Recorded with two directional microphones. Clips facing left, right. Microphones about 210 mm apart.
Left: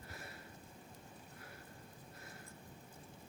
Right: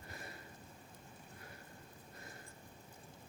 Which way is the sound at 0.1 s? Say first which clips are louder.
Right 3 dB; 5° left (ahead or behind).